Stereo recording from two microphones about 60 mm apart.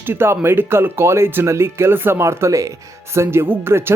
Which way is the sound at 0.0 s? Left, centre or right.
Right.